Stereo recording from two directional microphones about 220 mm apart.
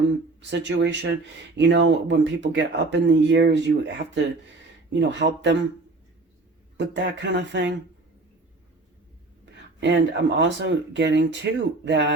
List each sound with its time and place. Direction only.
0.6 s speech: 55° right (ahead or behind)
6.7 s speech: 55° right (ahead or behind)
9.8 s speech: 55° right (ahead or behind)